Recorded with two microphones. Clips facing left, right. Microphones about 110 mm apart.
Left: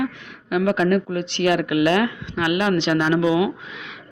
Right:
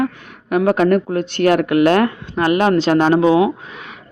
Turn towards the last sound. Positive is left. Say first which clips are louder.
# right 6 dB
turn(degrees=-35)  # may be behind; listen again after turning